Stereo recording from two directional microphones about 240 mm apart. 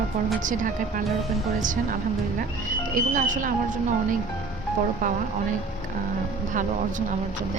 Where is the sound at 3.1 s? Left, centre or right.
Right.